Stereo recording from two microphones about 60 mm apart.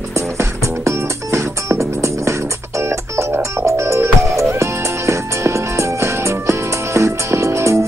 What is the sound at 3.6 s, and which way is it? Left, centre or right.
Music, right.